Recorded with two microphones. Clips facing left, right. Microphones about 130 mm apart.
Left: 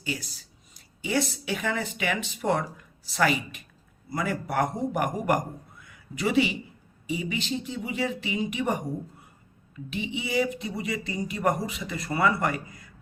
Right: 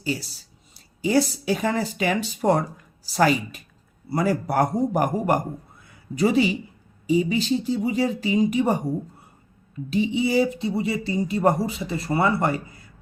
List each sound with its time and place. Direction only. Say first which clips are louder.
0.0 s speech: right 6 dB; 35° right (ahead or behind)